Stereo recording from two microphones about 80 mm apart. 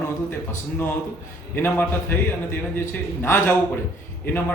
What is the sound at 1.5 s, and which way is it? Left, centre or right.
A man's voice, left.